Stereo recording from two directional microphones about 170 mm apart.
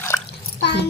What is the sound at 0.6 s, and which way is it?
Speech, 80° left.